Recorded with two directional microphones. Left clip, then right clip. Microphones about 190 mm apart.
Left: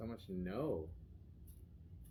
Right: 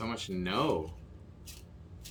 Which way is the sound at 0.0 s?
5° right (ahead or behind).